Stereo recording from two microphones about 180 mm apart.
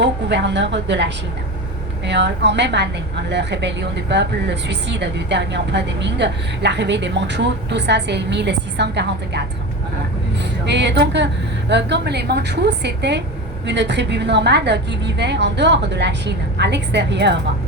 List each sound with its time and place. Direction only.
0.0 s a woman's voice: 75° right (ahead or behind)
10.7 s a woman's voice: 75° right (ahead or behind)